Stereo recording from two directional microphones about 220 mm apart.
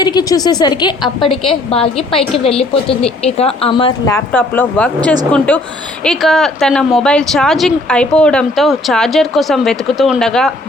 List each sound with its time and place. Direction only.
0.0 s speech: 20° left (ahead or behind)
3.2 s a woman's voice: 30° left (ahead or behind); by 10.5 s centre (ahead or behind)